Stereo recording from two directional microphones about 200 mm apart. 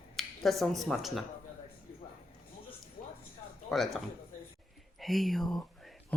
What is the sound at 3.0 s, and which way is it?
Music, 40° left (ahead or behind).